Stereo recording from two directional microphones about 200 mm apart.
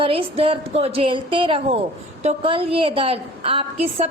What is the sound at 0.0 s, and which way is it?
A woman's voice, 25° right (ahead or behind).